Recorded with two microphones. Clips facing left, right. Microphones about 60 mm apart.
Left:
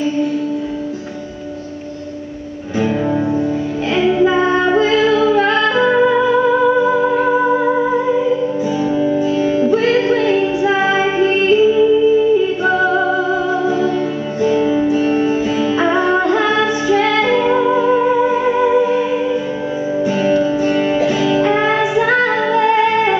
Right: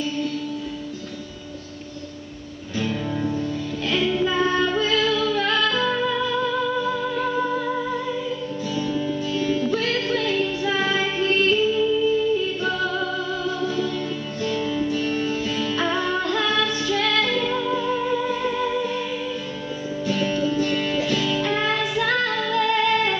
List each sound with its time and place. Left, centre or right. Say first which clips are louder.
2.8 s music: left 9 dB; left
20.1 s music: left 7 dB; left